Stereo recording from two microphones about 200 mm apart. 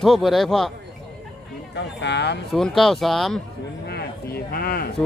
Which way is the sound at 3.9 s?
50° left (ahead or behind).